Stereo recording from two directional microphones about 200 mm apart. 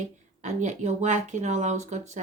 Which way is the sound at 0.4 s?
35° right (ahead or behind).